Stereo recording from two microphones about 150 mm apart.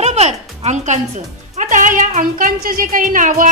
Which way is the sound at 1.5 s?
60° right (ahead or behind).